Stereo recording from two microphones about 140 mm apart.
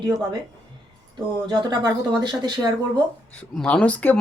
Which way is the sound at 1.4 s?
35° right (ahead or behind).